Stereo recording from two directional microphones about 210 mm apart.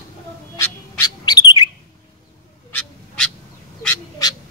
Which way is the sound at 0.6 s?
15° left (ahead or behind).